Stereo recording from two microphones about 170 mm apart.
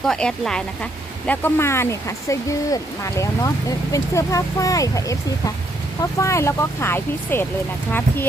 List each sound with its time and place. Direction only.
0.0 s speech: 5° left (ahead or behind)